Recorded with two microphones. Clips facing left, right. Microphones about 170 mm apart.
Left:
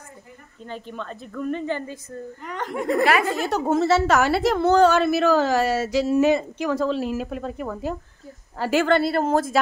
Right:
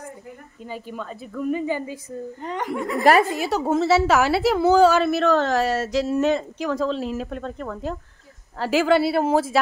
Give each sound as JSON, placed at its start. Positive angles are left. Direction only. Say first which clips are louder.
{"t": 0.7, "sound": "a woman's voice", "louder": "right 1 dB", "side_deg": -10}
{"t": 3.0, "sound": "a woman's voice", "louder": "right 4 dB", "side_deg": -40}
{"t": 3.3, "sound": "a woman's voice", "louder": "even", "side_deg": -5}